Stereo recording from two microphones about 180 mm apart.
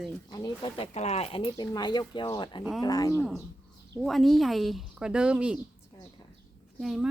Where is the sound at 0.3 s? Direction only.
25° left (ahead or behind).